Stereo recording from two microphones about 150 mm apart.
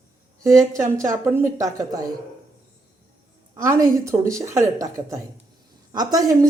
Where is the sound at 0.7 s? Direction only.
20° right (ahead or behind).